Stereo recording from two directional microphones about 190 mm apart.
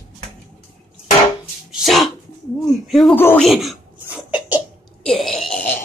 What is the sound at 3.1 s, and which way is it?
Speech, 10° left (ahead or behind).